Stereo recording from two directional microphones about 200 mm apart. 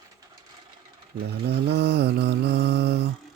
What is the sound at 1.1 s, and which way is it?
Mantra, 55° right (ahead or behind).